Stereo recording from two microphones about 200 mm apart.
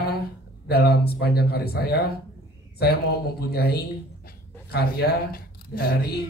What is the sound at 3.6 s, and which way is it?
Speech, 50° left (ahead or behind).